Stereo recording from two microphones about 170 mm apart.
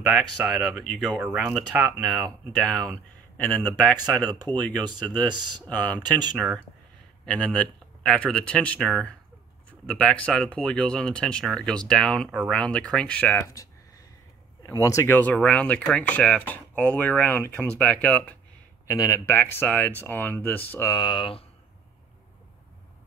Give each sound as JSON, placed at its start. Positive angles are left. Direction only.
{"t": 0.0, "sound": "speech", "side_deg": 0}
{"t": 4.2, "sound": "speech", "side_deg": -25}
{"t": 6.3, "sound": "speech", "side_deg": -5}
{"t": 7.2, "sound": "speech", "side_deg": 5}
{"t": 14.7, "sound": "speech", "side_deg": 15}
{"t": 18.9, "sound": "speech", "side_deg": 20}
{"t": 20.9, "sound": "speech", "side_deg": 25}